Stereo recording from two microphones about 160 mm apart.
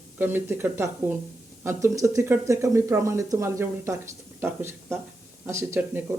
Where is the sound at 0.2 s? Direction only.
15° right (ahead or behind).